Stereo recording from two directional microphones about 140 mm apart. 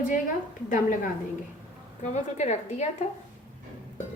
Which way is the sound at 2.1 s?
55° left (ahead or behind).